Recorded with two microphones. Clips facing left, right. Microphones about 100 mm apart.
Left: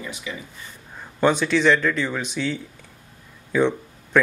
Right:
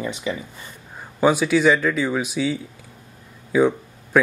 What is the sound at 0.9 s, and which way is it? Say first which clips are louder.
Speech: right 2 dB; 5° right (ahead or behind).